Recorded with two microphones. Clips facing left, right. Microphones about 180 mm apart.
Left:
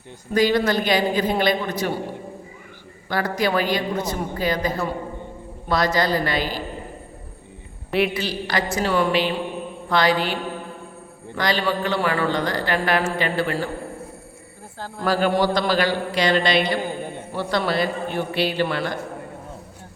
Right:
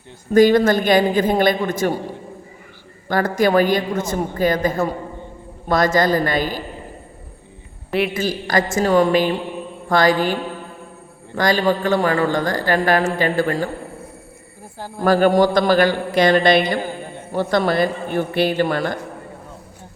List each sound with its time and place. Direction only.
0.3 s a man's voice: 50° right (ahead or behind)
3.1 s a man's voice: 50° right (ahead or behind)
7.9 s a man's voice: centre (ahead or behind)
8.1 s a man's voice: 45° right (ahead or behind)
11.3 s a man's voice: 45° right (ahead or behind)
14.8 s speech: 15° right (ahead or behind)
15.0 s a man's voice: 50° right (ahead or behind)